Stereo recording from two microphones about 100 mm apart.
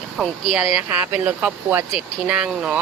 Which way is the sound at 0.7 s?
15° right (ahead or behind).